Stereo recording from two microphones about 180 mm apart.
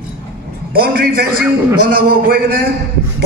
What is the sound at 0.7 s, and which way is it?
A man's voice, 55° right (ahead or behind).